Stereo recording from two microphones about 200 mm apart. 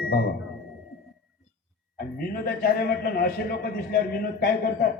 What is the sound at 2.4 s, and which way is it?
A man's voice, 50° left (ahead or behind).